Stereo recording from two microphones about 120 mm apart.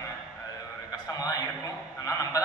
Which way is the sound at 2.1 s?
30° left (ahead or behind).